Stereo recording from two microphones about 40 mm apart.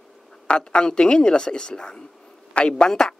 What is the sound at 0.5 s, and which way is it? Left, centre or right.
A man's voice, left.